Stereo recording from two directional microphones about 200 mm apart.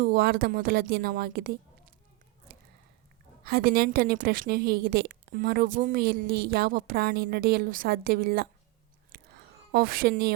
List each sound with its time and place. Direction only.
0.0 s a woman's voice: 50° right (ahead or behind)
3.4 s a woman's voice: 50° right (ahead or behind)
9.1 s a sound: 50° right (ahead or behind)